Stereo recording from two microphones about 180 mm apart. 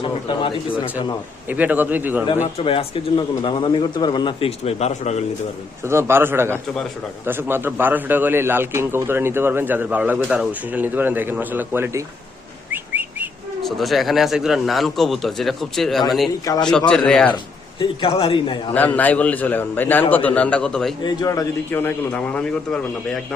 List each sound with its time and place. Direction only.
0.0 s bird: 30° left (ahead or behind)
1.5 s a man's voice: 10° right (ahead or behind)
2.4 s speech: 35° left (ahead or behind)
5.8 s a man's voice: 15° right (ahead or behind)
12.7 s whistling: 10° right (ahead or behind)
13.6 s speech: centre (ahead or behind)
17.3 s speech: 30° left (ahead or behind)
18.7 s a man's voice: 10° left (ahead or behind)
21.0 s a man's voice: 20° left (ahead or behind); by 22.8 s 5° left (ahead or behind)